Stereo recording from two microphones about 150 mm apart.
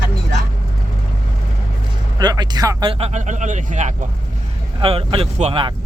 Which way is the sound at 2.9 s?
45° right (ahead or behind).